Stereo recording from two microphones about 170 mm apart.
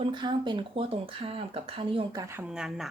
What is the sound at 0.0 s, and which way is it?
Speech, 25° right (ahead or behind).